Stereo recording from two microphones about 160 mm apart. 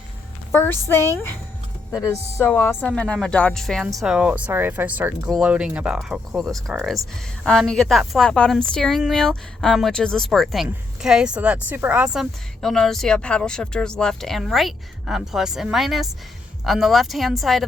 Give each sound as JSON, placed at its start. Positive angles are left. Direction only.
{"t": 0.5, "sound": "a woman's voice", "side_deg": 10}